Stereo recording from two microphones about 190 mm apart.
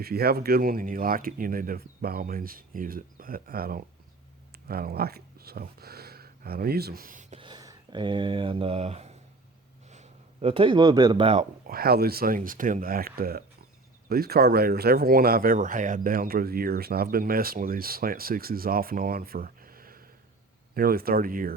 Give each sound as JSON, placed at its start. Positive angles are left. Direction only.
{"t": 0.0, "sound": "speech", "side_deg": -55}
{"t": 11.6, "sound": "speech", "side_deg": -50}